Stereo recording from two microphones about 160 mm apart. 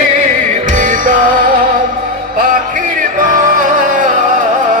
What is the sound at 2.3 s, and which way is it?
Music, 65° right (ahead or behind).